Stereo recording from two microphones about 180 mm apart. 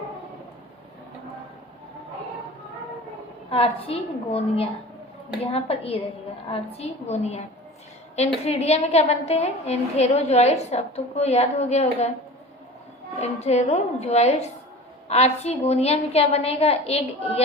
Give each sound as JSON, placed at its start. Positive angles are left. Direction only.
{"t": 3.5, "sound": "a woman's voice", "side_deg": 35}
{"t": 13.1, "sound": "a woman's voice", "side_deg": 35}